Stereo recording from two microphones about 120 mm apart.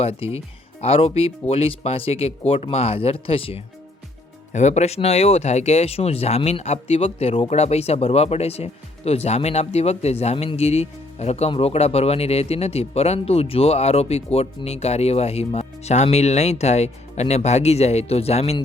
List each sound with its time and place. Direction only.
0.0 s speech: 55° left (ahead or behind)
4.5 s speech: 75° left (ahead or behind); by 18.6 s 60° left (ahead or behind)